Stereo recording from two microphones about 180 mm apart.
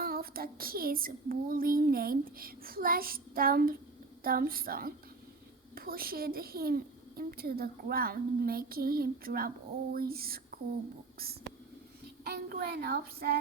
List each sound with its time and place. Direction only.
0.0 s child singing: 55° right (ahead or behind)
9.9 s a sound: 60° right (ahead or behind)
11.2 s speech: 60° right (ahead or behind)
12.2 s child singing: 60° right (ahead or behind)